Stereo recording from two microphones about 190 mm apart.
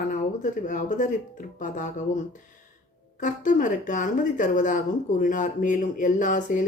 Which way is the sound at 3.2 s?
40° left (ahead or behind).